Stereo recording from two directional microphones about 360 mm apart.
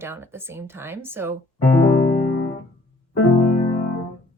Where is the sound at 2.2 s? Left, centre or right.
Left.